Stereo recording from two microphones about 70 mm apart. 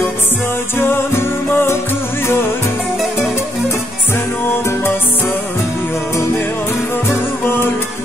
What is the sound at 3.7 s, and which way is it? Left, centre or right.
Music, left.